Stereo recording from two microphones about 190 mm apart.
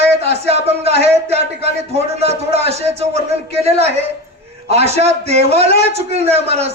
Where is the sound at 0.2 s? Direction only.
35° right (ahead or behind).